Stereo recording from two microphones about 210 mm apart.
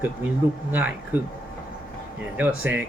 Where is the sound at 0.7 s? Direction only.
10° right (ahead or behind).